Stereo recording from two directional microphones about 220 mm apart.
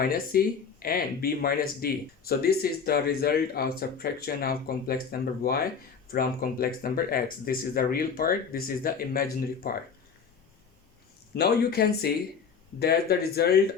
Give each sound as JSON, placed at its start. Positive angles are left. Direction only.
{"t": 0.0, "sound": "speech", "side_deg": 45}
{"t": 11.3, "sound": "speech", "side_deg": 45}